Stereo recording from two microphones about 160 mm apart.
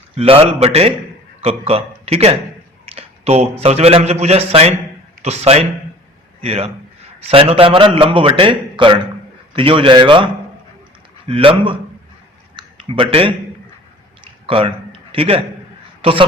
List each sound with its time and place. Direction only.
0.2 s a man's voice: 35° right (ahead or behind)
2.8 s a sound: 40° right (ahead or behind)
3.6 s a man's voice: 40° right (ahead or behind)
11.3 s a man's voice: 35° right (ahead or behind)
12.5 s a sound: 35° right (ahead or behind)
14.4 s a man's voice: 35° right (ahead or behind)